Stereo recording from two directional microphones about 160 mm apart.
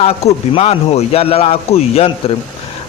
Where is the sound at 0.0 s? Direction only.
40° left (ahead or behind).